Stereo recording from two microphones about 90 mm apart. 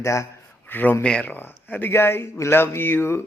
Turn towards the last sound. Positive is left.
turn(degrees=25)  # may be behind; listen again after turning